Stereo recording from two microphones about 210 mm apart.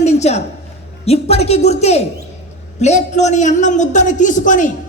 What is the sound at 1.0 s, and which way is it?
A man's voice, 30° left (ahead or behind).